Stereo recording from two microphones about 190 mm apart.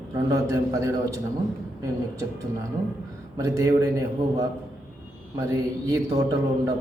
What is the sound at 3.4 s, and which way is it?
A man's voice, 15° right (ahead or behind).